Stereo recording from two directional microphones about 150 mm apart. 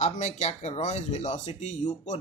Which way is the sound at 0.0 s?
50° left (ahead or behind).